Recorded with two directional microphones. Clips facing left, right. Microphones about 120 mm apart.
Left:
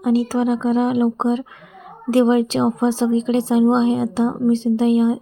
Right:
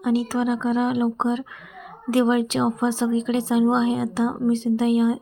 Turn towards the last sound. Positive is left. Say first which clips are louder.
# left 3 dB
turn(degrees=30)  # may be behind; listen again after turning